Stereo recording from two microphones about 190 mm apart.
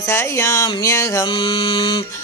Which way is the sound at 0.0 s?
15° left (ahead or behind).